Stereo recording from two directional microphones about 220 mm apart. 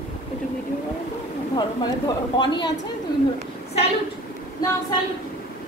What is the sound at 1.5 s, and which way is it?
Speech, 20° left (ahead or behind).